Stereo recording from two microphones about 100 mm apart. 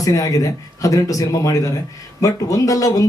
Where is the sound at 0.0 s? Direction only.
35° left (ahead or behind).